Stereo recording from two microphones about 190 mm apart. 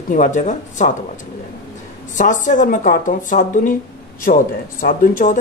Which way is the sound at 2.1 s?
40° left (ahead or behind).